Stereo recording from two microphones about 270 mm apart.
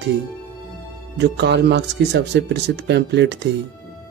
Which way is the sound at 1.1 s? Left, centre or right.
Right.